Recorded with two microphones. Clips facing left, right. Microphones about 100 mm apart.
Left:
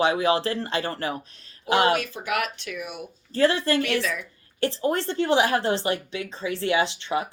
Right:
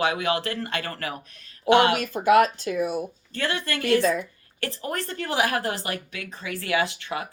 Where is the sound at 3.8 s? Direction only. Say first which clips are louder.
Right 5 dB; 35° right (ahead or behind).